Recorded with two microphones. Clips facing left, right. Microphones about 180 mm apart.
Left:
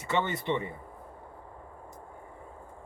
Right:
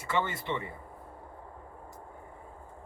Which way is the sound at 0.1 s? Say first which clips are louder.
Left 3 dB; 20° left (ahead or behind).